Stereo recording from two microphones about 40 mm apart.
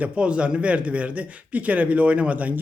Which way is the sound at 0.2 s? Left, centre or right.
Right.